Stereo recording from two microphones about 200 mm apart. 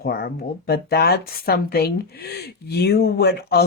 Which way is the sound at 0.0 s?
50° left (ahead or behind).